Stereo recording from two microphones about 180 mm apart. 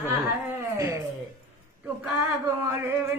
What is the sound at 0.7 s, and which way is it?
Speech, 15° right (ahead or behind).